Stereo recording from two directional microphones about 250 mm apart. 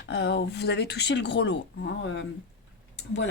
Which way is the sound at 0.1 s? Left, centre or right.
Left.